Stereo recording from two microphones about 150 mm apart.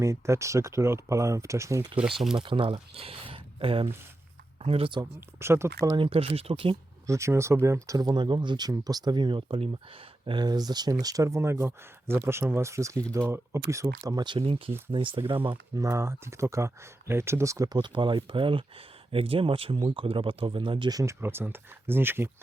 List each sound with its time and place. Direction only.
0.0 s speech: 20° right (ahead or behind)
2.0 s speech: 5° right (ahead or behind)
2.3 s speech: 35° right (ahead or behind)
5.4 s speech: 15° right (ahead or behind)
5.8 s speech: 30° right (ahead or behind)
7.1 s speech: 20° right (ahead or behind)
13.1 s speech: 10° left (ahead or behind)
13.7 s speech: 20° right (ahead or behind); by 15.5 s 35° right (ahead or behind)
15.7 s speech: 20° right (ahead or behind)
17.7 s speech: 35° right (ahead or behind)
21.0 s speech: 15° right (ahead or behind)